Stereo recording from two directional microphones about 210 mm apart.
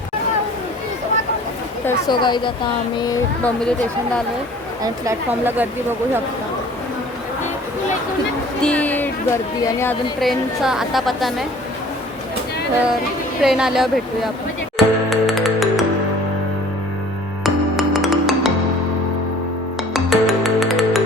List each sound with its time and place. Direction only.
2.0 s speech: 20° left (ahead or behind)
3.4 s a woman's voice: 5° left (ahead or behind)
4.8 s a woman's voice: 10° right (ahead or behind)
8.6 s speech: 5° left (ahead or behind)
10.2 s a woman's voice: centre (ahead or behind)
13.4 s a woman's voice: centre (ahead or behind)
14.8 s music: centre (ahead or behind)
17.4 s music: centre (ahead or behind)
19.9 s music: centre (ahead or behind)